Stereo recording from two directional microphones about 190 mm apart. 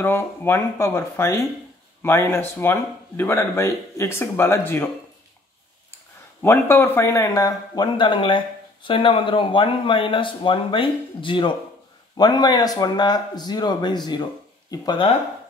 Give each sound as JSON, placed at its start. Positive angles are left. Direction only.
{"t": 0.0, "sound": "speech", "side_deg": 10}
{"t": 6.4, "sound": "speech", "side_deg": 10}